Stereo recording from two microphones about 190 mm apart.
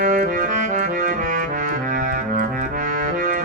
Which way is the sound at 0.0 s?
45° right (ahead or behind).